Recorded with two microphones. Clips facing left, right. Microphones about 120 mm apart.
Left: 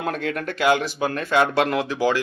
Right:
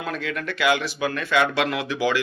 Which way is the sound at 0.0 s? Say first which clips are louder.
Left 3 dB; 50° left (ahead or behind).